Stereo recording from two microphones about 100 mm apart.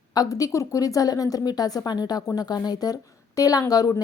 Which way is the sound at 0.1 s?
35° left (ahead or behind).